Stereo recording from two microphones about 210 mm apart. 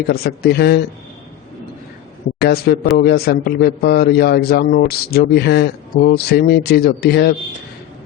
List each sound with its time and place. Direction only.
0.1 s a man's voice: 50° left (ahead or behind)
2.4 s a man's voice: 50° left (ahead or behind)